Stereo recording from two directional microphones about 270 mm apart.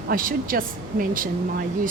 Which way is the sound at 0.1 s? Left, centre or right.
Right.